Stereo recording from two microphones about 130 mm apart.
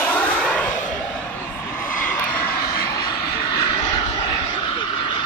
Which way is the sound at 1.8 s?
90° left.